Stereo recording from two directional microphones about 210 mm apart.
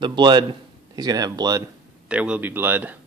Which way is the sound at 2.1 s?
5° right (ahead or behind).